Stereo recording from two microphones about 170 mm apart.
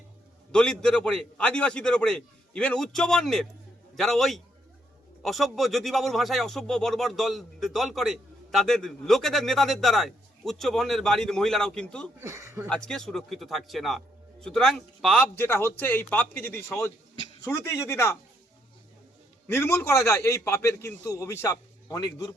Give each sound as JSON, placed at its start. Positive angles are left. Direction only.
{"t": 0.5, "sound": "a man's voice", "side_deg": 5}
{"t": 12.2, "sound": "speech", "side_deg": -15}
{"t": 12.6, "sound": "a man's voice", "side_deg": 5}
{"t": 19.5, "sound": "a man's voice", "side_deg": 15}